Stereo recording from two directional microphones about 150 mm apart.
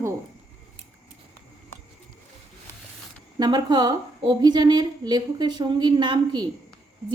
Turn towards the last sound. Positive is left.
turn(degrees=-30)  # may be behind; listen again after turning